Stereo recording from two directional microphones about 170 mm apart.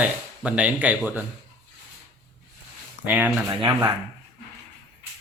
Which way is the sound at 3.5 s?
20° right (ahead or behind).